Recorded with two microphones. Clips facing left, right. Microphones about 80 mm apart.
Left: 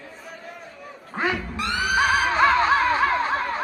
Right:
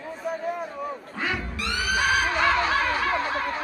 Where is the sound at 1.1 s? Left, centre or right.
Left.